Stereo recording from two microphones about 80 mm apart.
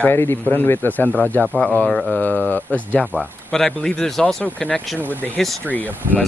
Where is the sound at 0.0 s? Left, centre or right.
Left.